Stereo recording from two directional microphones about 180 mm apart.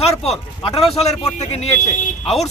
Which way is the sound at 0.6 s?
35° left (ahead or behind).